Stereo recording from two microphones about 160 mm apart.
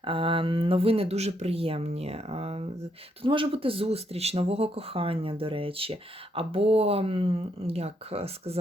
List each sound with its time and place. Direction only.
0.0 s speech: 35° right (ahead or behind)